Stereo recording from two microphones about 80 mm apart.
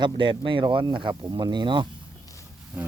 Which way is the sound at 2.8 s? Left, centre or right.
Centre.